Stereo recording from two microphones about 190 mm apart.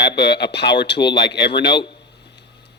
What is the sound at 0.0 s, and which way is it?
Speech, 60° left (ahead or behind).